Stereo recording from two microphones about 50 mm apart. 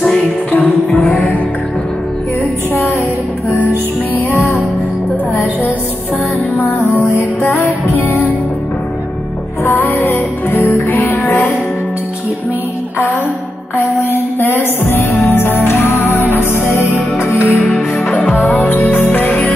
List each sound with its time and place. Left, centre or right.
0.0 s music: centre
6.6 s music: left
9.7 s music: left
10.9 s music: left
13.7 s music: left
17.7 s music: left